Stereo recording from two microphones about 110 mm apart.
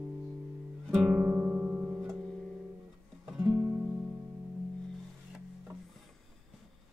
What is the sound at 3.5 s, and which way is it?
Music, 20° right (ahead or behind).